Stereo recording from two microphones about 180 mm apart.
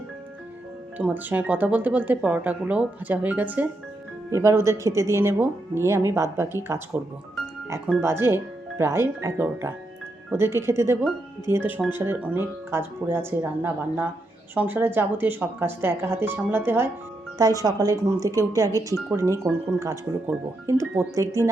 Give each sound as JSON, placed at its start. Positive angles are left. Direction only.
{"t": 0.9, "sound": "speech", "side_deg": -10}
{"t": 8.0, "sound": "speech", "side_deg": -10}